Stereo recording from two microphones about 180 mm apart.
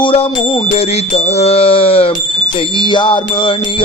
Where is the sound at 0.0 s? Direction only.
30° left (ahead or behind).